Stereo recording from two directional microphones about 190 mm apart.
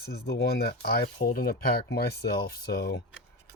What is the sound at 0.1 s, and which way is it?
Speech, 60° left (ahead or behind).